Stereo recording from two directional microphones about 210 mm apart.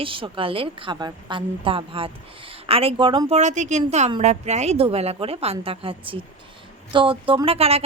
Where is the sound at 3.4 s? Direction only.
35° right (ahead or behind).